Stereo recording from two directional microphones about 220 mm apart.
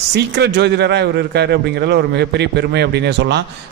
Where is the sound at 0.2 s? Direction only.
50° right (ahead or behind).